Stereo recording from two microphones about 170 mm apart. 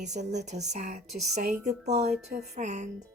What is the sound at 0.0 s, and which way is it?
Speech, 45° right (ahead or behind).